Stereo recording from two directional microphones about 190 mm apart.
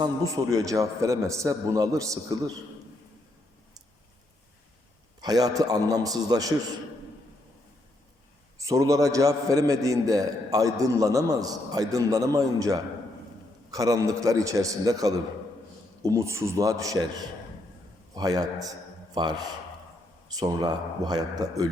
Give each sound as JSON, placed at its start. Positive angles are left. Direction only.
{"t": 0.5, "sound": "a man's voice", "side_deg": -15}
{"t": 5.2, "sound": "speech", "side_deg": -20}
{"t": 8.5, "sound": "a man's voice", "side_deg": -15}
{"t": 18.1, "sound": "speech", "side_deg": -20}